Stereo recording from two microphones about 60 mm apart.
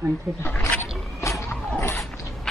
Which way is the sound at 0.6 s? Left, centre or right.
Left.